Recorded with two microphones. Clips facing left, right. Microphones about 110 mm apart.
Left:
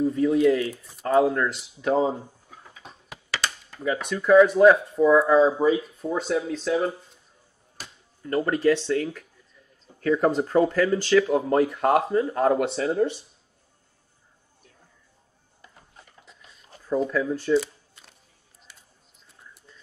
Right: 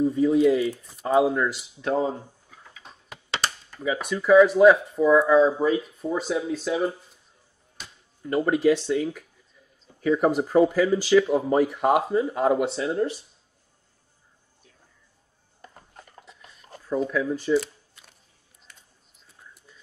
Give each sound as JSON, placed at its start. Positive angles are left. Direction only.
{"t": 0.0, "sound": "speech", "side_deg": 0}
{"t": 3.8, "sound": "speech", "side_deg": -5}
{"t": 8.2, "sound": "speech", "side_deg": -10}
{"t": 15.6, "sound": "a sound", "side_deg": -45}
{"t": 17.1, "sound": "camera", "side_deg": 0}